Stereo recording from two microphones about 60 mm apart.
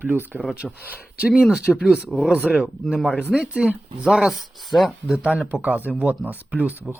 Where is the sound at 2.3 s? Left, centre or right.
Right.